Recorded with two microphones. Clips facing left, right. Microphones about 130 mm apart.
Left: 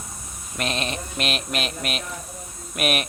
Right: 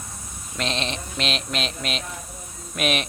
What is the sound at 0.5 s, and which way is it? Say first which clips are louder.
Speech: even; 5° left (ahead or behind).